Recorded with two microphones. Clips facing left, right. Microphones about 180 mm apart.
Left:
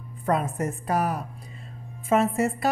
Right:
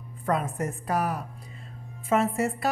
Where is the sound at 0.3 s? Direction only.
25° left (ahead or behind).